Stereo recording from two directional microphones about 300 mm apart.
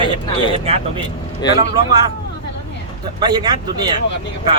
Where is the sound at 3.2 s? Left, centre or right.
Centre.